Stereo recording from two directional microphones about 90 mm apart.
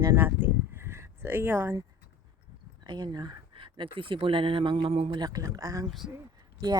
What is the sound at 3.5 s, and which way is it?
Speech, 75° right (ahead or behind).